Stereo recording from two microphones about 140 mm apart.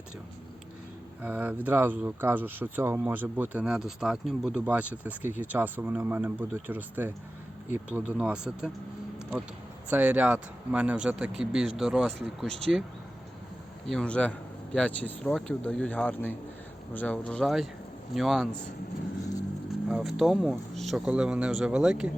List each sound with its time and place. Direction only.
1.2 s speech: 15° right (ahead or behind)
9.9 s speech: 10° right (ahead or behind); by 12.8 s 5° left (ahead or behind)
13.8 s speech: 5° left (ahead or behind)
19.9 s speech: 5° right (ahead or behind)